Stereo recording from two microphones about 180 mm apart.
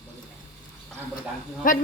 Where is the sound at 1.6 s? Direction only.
50° left (ahead or behind).